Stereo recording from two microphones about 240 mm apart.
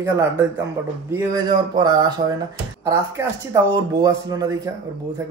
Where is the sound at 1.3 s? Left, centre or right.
Centre.